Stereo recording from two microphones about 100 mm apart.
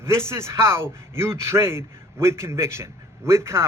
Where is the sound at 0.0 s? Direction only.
25° right (ahead or behind).